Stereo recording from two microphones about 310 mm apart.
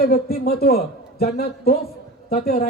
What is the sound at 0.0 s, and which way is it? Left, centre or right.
A man's voice, left.